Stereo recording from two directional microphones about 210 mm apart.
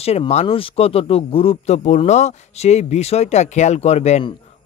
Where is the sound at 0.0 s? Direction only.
30° left (ahead or behind).